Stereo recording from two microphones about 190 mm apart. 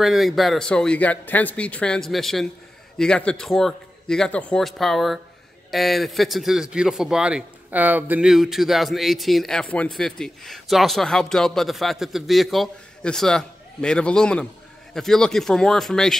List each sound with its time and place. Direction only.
0.0 s a man's voice: centre (ahead or behind)